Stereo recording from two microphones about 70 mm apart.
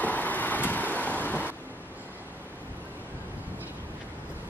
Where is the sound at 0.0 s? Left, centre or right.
Left.